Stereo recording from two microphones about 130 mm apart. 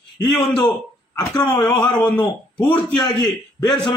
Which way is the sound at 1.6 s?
10° left (ahead or behind).